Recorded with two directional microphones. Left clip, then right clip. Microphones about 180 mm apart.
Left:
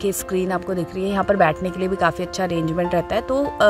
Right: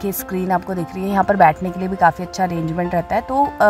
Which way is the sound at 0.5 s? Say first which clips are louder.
Right 3 dB; 15° left (ahead or behind).